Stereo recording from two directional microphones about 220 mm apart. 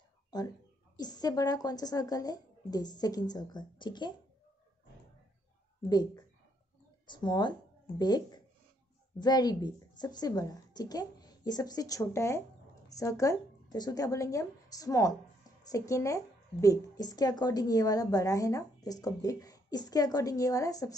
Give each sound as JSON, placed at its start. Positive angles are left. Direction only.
{"t": 0.3, "sound": "speech", "side_deg": 20}
{"t": 5.9, "sound": "speech", "side_deg": 15}